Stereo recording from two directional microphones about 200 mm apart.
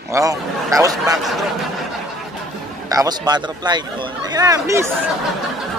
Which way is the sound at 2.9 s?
20° right (ahead or behind).